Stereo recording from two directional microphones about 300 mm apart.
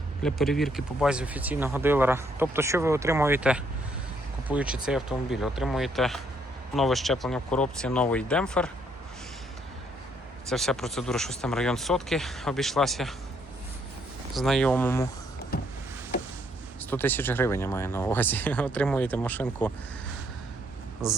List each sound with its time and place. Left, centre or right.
0.2 s speech: centre
10.5 s speech: centre
14.3 s speech: centre
15.5 s power windows: left
16.9 s speech: centre